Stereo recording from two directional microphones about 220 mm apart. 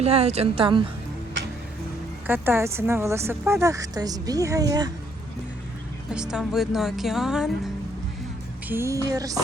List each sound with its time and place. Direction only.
0.0 s a woman's voice: 30° right (ahead or behind)
2.2 s speech: 10° right (ahead or behind)
6.1 s a woman's voice: 5° right (ahead or behind)
8.7 s speech: 15° right (ahead or behind)